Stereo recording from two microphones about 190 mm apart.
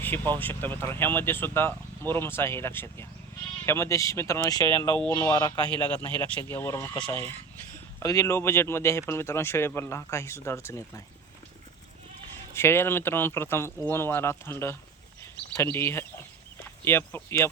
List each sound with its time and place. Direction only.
0.0 s speech: 10° left (ahead or behind)
5.8 s speech: 10° left (ahead or behind)
12.5 s speech: 15° left (ahead or behind)
15.2 s a sound: 15° left (ahead or behind)
16.6 s speech: 10° left (ahead or behind)